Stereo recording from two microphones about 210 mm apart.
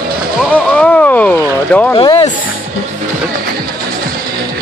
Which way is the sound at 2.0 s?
25° left (ahead or behind).